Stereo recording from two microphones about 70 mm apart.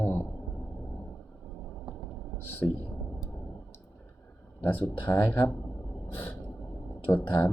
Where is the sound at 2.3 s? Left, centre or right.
Left.